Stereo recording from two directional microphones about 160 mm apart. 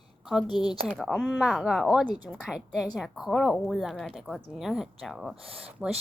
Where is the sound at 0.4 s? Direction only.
25° left (ahead or behind).